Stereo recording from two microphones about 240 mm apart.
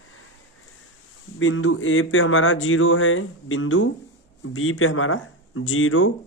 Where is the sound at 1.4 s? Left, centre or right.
Left.